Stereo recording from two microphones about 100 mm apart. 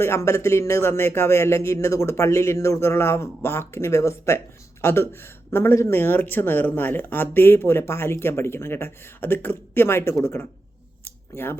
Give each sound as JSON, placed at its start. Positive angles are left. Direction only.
{"t": 0.0, "sound": "speech", "side_deg": 25}